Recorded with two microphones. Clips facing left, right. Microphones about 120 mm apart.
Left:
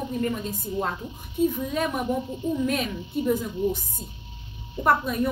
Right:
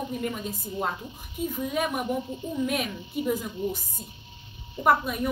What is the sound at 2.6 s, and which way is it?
Speech, 5° right (ahead or behind).